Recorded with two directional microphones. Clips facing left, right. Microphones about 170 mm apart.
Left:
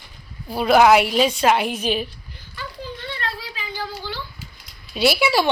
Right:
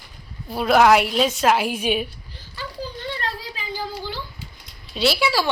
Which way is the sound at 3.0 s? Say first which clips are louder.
Even; 40° right (ahead or behind).